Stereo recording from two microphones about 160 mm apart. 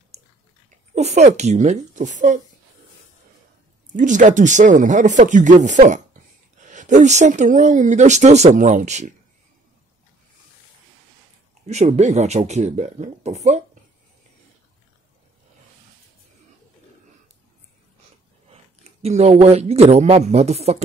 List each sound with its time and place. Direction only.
0.9 s speech: 45° right (ahead or behind)
3.9 s speech: 50° right (ahead or behind)
11.6 s speech: 45° right (ahead or behind)
18.5 s speech: 40° right (ahead or behind)